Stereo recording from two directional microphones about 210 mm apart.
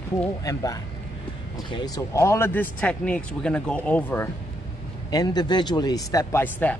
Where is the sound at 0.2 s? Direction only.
15° left (ahead or behind).